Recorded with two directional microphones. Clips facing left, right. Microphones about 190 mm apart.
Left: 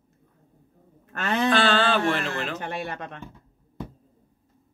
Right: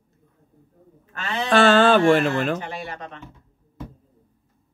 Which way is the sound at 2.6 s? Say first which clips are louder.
Left 1 dB; 50° left (ahead or behind).